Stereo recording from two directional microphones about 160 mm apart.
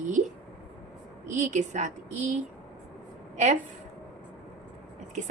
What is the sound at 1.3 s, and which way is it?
Speech, 50° right (ahead or behind).